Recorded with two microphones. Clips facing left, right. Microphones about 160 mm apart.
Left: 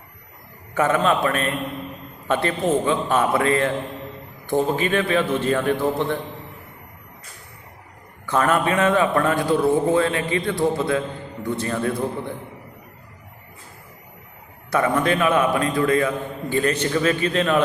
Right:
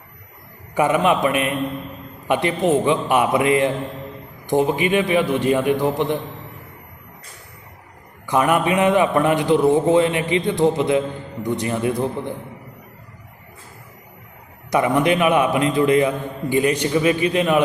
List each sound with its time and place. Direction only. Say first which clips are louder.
0.7 s a man's voice: right 2 dB; 15° right (ahead or behind)
8.3 s a man's voice: right 2 dB; 15° right (ahead or behind)
14.7 s a man's voice: right 3 dB; 15° right (ahead or behind)